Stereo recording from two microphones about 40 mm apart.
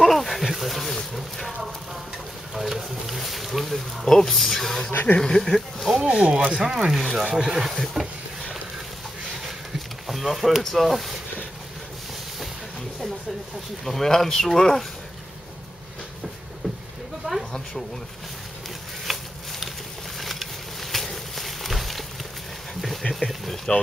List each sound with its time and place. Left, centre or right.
0.0 s speech: centre
2.5 s speech: centre
6.0 s speech: right
6.9 s speech: centre
10.0 s speech: centre
13.8 s speech: centre
17.3 s a sound: centre
19.1 s a sound: centre
23.1 s a sound: centre